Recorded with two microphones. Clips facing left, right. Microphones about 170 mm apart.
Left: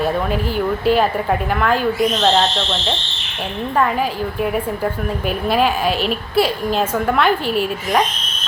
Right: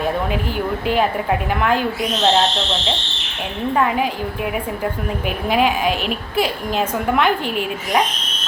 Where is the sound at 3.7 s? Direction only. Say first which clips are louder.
Even; 10° right (ahead or behind).